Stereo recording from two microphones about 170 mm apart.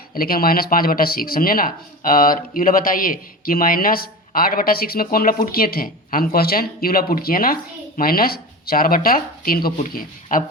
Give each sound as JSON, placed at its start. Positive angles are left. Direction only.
{"t": 0.1, "sound": "speech", "side_deg": 60}